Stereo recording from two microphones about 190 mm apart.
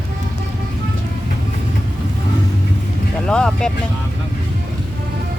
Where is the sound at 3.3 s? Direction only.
5° left (ahead or behind).